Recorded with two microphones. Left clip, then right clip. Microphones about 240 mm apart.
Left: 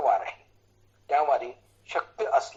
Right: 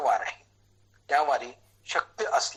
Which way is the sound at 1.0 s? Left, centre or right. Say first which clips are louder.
Left 1 dB; right.